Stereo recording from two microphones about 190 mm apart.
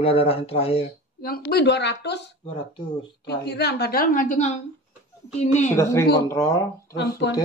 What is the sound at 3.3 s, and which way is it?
A woman's voice, 60° left (ahead or behind).